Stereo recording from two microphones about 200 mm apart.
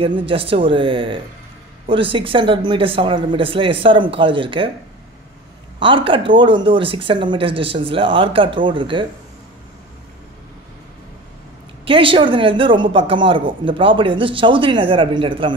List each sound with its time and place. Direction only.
0.0 s speech: 25° right (ahead or behind)
5.8 s speech: 25° right (ahead or behind)
11.8 s speech: 25° right (ahead or behind)